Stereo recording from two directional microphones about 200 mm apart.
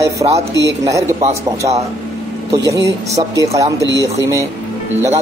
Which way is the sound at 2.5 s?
15° right (ahead or behind).